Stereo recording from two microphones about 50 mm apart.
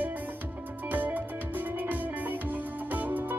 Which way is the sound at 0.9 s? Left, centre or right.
Right.